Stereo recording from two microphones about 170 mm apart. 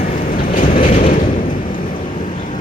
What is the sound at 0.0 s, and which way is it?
Train, 55° left (ahead or behind).